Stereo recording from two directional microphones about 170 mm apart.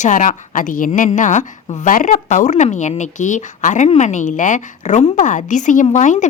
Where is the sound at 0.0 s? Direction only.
50° left (ahead or behind).